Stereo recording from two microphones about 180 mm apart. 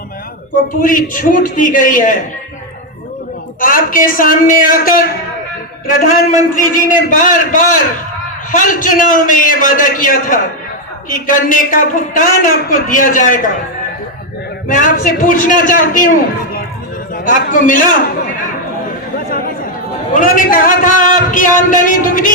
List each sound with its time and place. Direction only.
0.8 s a man's voice: 50° left (ahead or behind)
3.6 s a man's voice: 50° left (ahead or behind)
14.7 s a man's voice: 45° left (ahead or behind)
17.2 s a man's voice: 50° left (ahead or behind)
20.1 s a man's voice: 50° left (ahead or behind)